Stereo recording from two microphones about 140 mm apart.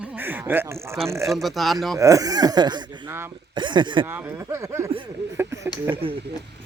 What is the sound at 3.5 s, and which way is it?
Speech, 35° right (ahead or behind).